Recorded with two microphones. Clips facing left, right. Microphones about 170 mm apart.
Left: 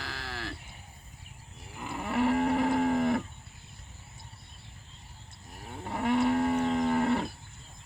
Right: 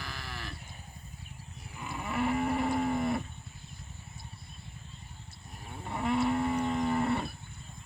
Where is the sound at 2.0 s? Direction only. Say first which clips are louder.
Left 4 dB; 65° left (ahead or behind).